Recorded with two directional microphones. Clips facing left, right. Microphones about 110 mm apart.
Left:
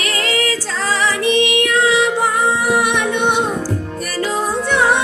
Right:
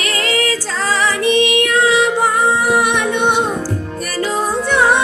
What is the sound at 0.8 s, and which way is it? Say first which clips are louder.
Female singing: right 1 dB; 40° right (ahead or behind).